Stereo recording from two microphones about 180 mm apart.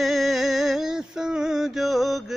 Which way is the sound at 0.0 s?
Centre (ahead or behind).